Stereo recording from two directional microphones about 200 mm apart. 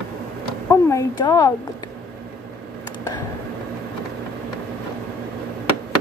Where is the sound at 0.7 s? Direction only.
15° left (ahead or behind).